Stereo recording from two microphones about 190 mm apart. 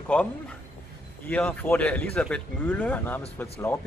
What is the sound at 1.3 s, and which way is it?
Speech, 10° left (ahead or behind).